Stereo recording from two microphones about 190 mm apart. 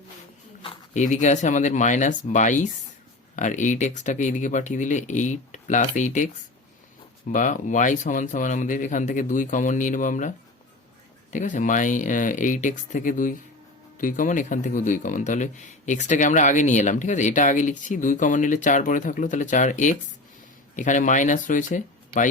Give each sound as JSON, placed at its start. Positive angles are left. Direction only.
{"t": 0.9, "sound": "speech", "side_deg": 40}
{"t": 7.3, "sound": "speech", "side_deg": 40}